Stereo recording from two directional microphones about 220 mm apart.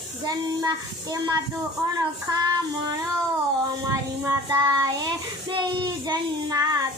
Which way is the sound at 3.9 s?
15° right (ahead or behind).